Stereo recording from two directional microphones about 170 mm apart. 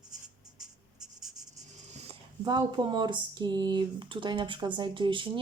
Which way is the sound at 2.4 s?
25° right (ahead or behind).